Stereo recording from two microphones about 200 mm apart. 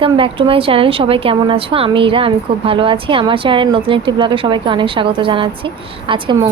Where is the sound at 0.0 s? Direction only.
25° right (ahead or behind).